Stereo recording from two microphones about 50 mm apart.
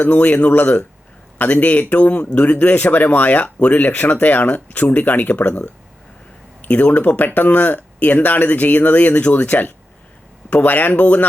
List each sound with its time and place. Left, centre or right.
0.0 s speech: left
6.7 s speech: left